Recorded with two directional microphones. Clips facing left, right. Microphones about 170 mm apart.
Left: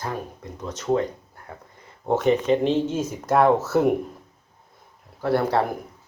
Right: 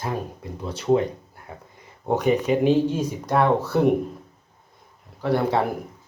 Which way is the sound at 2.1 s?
15° right (ahead or behind).